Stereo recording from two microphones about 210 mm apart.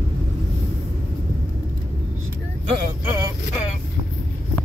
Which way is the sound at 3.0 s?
15° right (ahead or behind).